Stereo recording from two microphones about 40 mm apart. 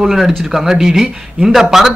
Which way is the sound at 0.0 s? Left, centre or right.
Centre.